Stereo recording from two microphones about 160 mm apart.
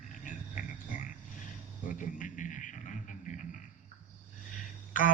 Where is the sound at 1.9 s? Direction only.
55° left (ahead or behind).